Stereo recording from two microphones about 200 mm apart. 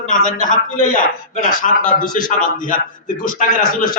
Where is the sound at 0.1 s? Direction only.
40° left (ahead or behind).